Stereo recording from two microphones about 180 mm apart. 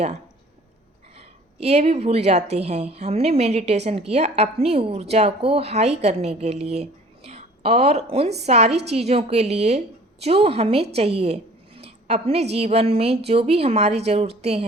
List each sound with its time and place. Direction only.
1.5 s a woman's voice: 35° right (ahead or behind)